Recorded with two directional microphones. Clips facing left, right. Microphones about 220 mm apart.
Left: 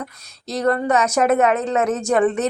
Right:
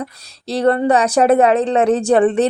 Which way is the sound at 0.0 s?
30° right (ahead or behind).